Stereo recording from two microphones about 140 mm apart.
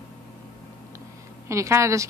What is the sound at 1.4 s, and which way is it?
Speech, 20° right (ahead or behind).